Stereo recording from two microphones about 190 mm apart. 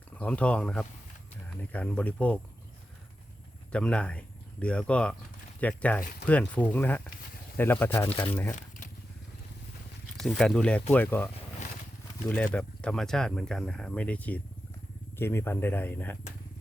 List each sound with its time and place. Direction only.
0.2 s speech: 5° left (ahead or behind)
3.7 s speech: 5° left (ahead or behind)
10.2 s speech: 5° left (ahead or behind)
12.5 s speech: 5° left (ahead or behind)